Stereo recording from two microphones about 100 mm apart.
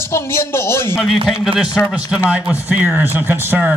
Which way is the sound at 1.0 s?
5° right (ahead or behind).